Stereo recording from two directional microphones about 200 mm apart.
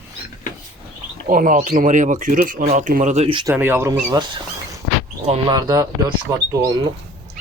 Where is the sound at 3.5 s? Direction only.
10° right (ahead or behind).